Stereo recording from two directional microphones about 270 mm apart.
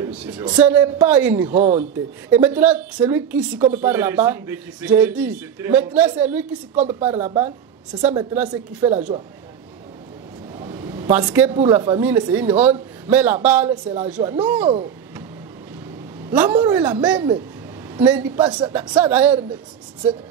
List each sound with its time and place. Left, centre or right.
0.0 s a man's voice: centre
1.5 s a woman's voice: right
2.2 s a woman's voice: centre
7.0 s a woman's voice: right
8.0 s a woman's voice: centre
10.6 s a sound: centre
11.1 s a woman's voice: centre
16.3 s a woman's voice: centre
18.8 s speech: centre